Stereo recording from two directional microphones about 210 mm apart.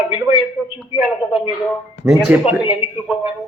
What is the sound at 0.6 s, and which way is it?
Speech, 5° left (ahead or behind).